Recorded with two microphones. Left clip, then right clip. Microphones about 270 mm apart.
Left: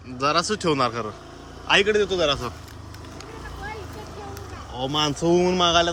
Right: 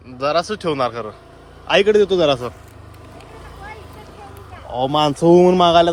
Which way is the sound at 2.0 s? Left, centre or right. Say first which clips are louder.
Right 7 dB; centre.